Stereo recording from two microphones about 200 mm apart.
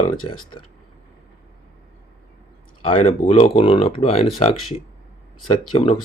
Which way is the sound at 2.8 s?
25° left (ahead or behind).